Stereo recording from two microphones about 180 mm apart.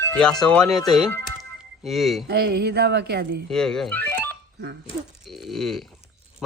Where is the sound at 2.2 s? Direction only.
60° right (ahead or behind).